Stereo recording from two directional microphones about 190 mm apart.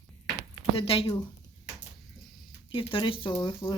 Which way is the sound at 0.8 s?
30° left (ahead or behind).